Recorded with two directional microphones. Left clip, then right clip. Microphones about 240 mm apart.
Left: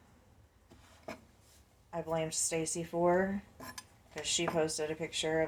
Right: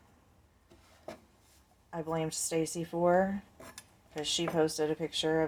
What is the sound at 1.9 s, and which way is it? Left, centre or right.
Speech, right.